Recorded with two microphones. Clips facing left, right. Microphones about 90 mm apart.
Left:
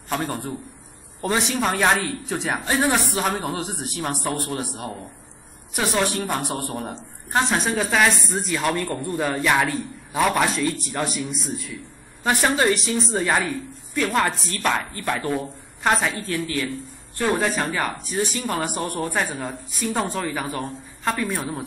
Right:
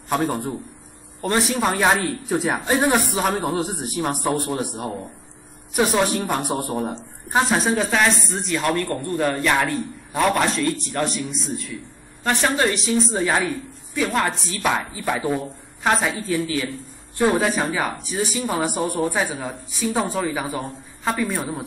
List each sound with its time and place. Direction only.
0.1 s a woman's voice: 10° right (ahead or behind)
1.2 s a woman's voice: centre (ahead or behind)
2.9 s a woman's voice: 15° right (ahead or behind)
3.3 s a woman's voice: centre (ahead or behind)
6.0 s a woman's voice: centre (ahead or behind)
16.4 s a woman's voice: 15° right (ahead or behind)
17.4 s a woman's voice: 5° right (ahead or behind)